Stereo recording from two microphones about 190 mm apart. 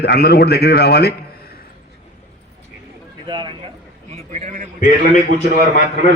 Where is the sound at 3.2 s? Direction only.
25° right (ahead or behind).